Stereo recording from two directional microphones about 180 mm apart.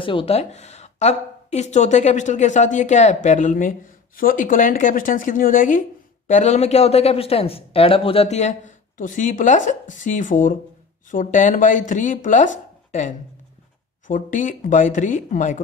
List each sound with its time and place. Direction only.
0.0 s a woman's voice: 30° left (ahead or behind); by 12.4 s 45° left (ahead or behind)
14.0 s a woman's voice: 45° left (ahead or behind)